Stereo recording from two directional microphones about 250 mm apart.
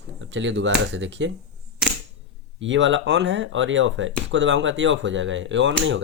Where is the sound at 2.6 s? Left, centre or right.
Right.